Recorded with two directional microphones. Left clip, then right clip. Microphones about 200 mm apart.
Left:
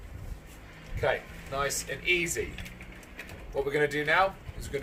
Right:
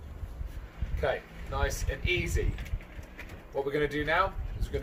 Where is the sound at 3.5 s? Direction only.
Centre (ahead or behind).